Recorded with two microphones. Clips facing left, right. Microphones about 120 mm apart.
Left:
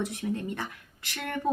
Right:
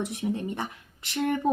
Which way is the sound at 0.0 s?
20° right (ahead or behind).